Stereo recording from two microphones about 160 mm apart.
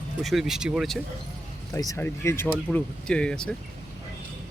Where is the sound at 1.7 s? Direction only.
20° left (ahead or behind).